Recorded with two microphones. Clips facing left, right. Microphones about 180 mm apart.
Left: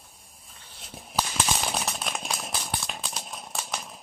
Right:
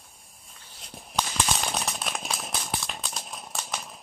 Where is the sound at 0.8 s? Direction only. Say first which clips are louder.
Left 1 dB; centre (ahead or behind).